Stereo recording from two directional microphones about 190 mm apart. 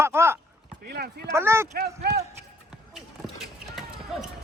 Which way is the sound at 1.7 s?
55° right (ahead or behind).